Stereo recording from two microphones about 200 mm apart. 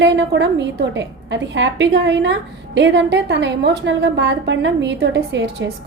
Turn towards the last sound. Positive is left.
turn(degrees=-60)  # may be behind; listen again after turning